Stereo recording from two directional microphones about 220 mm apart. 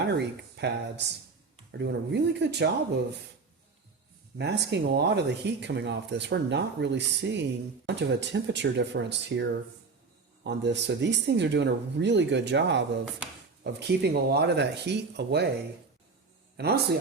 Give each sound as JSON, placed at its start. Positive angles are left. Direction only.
{"t": 0.2, "sound": "speech", "side_deg": -50}
{"t": 4.4, "sound": "speech", "side_deg": -50}
{"t": 16.6, "sound": "speech", "side_deg": -45}